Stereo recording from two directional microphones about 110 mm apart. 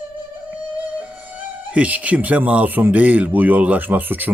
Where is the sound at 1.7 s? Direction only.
10° right (ahead or behind).